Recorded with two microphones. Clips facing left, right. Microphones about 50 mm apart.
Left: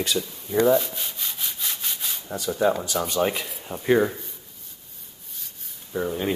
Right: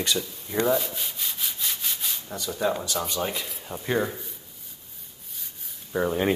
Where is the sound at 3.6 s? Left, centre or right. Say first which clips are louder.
Left 6 dB; centre.